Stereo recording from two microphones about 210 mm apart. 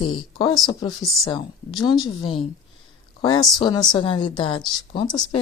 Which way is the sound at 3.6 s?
20° left (ahead or behind).